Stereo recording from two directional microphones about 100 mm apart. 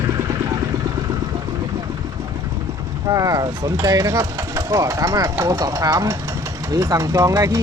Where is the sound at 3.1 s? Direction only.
35° right (ahead or behind).